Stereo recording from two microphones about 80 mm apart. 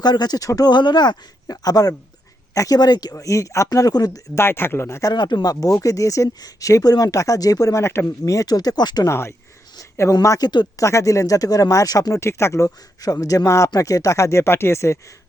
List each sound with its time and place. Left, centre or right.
0.0 s a man's voice: left
0.7 s a man's voice: left
4.4 s speech: left
5.1 s a man's voice: left
9.0 s speech: left
10.2 s speech: left